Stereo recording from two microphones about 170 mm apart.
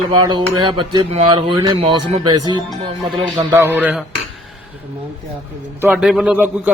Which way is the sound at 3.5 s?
15° right (ahead or behind).